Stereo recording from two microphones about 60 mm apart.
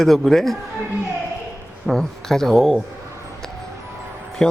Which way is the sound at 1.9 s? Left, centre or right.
Centre.